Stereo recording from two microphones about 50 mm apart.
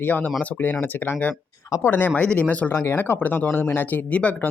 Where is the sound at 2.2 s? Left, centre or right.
Left.